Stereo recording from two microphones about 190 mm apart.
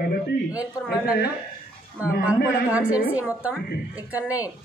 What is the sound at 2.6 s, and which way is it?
A man's voice, 5° right (ahead or behind).